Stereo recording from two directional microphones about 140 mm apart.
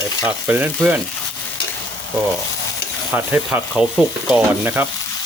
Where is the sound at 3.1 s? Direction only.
15° right (ahead or behind).